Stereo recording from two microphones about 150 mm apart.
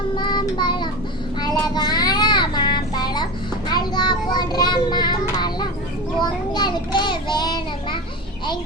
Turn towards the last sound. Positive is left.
turn(degrees=30)  # may be behind; listen again after turning